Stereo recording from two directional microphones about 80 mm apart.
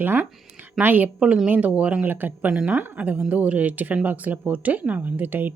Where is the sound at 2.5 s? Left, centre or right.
Centre.